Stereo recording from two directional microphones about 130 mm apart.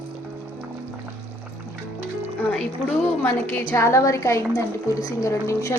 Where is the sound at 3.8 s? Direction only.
25° left (ahead or behind).